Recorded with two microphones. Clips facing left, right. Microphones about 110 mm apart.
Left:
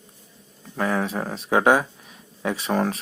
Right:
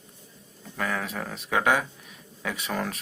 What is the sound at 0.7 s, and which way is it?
Speech, 30° left (ahead or behind).